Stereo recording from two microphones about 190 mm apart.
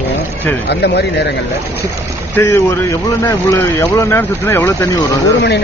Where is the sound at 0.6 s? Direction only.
60° left (ahead or behind).